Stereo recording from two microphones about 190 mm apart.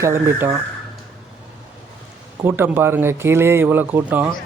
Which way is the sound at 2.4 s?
10° right (ahead or behind).